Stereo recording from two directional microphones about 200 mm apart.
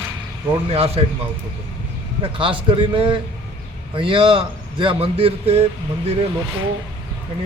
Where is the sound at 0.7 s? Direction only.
30° right (ahead or behind).